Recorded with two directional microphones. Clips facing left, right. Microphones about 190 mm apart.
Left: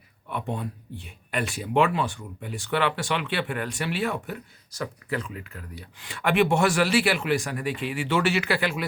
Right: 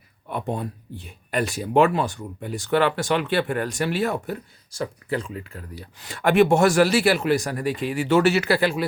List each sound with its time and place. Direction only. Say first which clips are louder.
0.3 s speech: right 3 dB; 40° right (ahead or behind)
4.7 s speech: right 4 dB; 30° right (ahead or behind)